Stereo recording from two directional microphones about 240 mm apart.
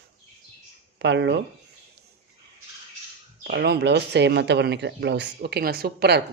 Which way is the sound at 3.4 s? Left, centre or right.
Right.